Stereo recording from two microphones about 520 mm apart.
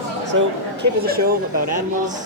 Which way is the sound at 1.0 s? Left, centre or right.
Centre.